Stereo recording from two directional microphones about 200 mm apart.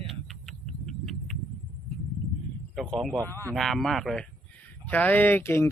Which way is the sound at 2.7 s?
Centre (ahead or behind).